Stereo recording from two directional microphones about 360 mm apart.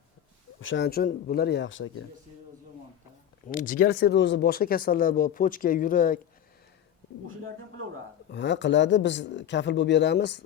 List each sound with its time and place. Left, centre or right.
0.6 s speech: left
3.5 s speech: left
8.3 s speech: left